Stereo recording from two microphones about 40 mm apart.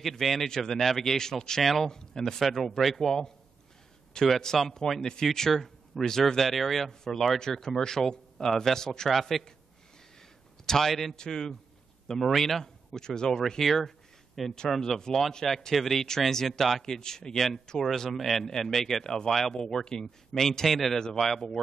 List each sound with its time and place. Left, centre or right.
0.0 s a man's voice: centre
4.6 s speech: centre
10.6 s a man's voice: centre